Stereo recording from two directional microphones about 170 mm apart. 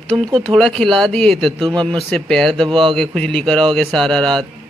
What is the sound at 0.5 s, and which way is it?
A man's voice, centre (ahead or behind).